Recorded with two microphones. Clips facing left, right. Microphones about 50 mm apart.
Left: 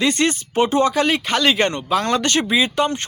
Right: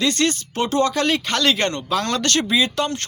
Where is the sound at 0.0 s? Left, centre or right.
Left.